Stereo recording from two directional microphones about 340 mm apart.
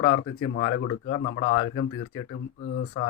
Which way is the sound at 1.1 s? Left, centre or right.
Left.